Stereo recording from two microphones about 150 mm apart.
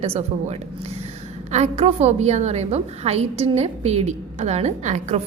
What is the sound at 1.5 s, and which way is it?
A woman's voice, 45° right (ahead or behind).